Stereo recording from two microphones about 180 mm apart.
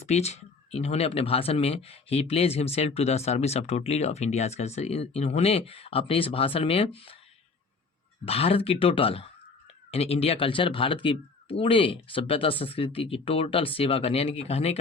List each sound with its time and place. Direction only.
0.0 s speech: 40° left (ahead or behind)
8.2 s speech: 35° left (ahead or behind)